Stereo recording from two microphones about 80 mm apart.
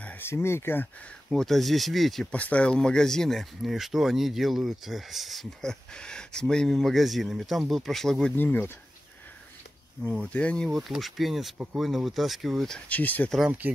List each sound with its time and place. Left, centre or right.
0.3 s speech: left
1.3 s speech: centre
2.3 s speech: centre
8.4 s speech: left
10.0 s speech: centre
10.7 s speech: centre
11.5 s speech: centre
11.8 s speech: centre
12.7 s speech: centre